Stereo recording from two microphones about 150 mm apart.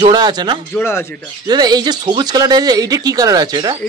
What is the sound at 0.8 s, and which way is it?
Speech, 15° left (ahead or behind).